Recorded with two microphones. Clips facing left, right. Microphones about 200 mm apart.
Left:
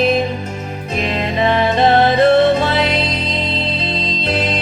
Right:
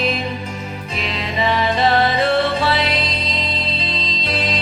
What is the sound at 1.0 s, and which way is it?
Music, 50° left (ahead or behind).